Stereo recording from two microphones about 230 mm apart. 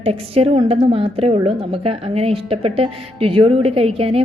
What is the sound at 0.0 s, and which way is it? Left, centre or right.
A woman's voice, right.